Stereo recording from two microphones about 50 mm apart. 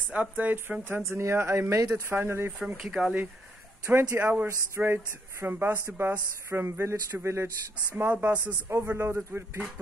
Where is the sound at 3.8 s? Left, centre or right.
Right.